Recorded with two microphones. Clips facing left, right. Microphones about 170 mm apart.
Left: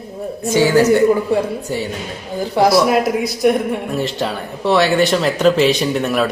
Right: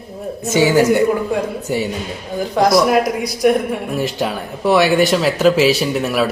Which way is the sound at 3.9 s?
15° right (ahead or behind).